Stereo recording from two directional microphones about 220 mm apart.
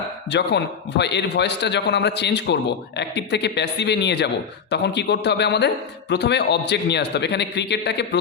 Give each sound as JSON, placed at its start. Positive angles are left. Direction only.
{"t": 0.3, "sound": "a man's voice", "side_deg": 50}